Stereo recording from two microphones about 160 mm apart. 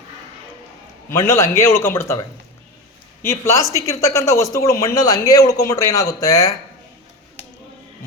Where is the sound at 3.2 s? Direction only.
20° left (ahead or behind).